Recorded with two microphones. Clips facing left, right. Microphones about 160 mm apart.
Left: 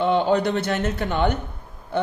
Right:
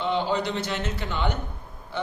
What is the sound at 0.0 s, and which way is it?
Speech, 55° left (ahead or behind).